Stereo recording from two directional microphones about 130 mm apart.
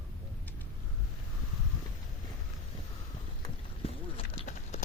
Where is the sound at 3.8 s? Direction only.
50° left (ahead or behind).